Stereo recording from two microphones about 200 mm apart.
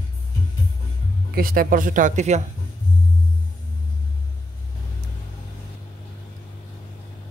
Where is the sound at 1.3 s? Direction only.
45° right (ahead or behind).